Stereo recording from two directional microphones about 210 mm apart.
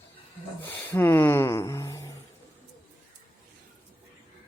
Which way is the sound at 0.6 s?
10° left (ahead or behind).